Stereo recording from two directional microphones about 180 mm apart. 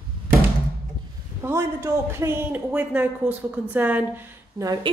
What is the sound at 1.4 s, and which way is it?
A man's voice, 15° right (ahead or behind).